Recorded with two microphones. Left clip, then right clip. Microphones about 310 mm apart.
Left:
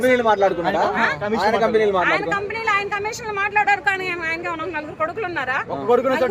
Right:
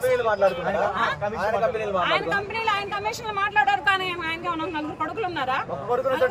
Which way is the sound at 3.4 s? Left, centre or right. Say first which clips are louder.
Left 3 dB; centre.